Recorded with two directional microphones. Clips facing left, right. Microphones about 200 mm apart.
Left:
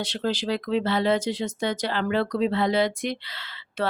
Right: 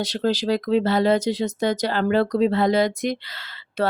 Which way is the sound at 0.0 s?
40° right (ahead or behind).